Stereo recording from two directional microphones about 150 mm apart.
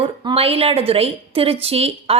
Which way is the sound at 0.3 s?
40° right (ahead or behind).